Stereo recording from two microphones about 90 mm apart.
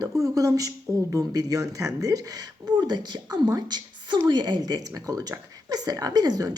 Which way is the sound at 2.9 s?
55° right (ahead or behind).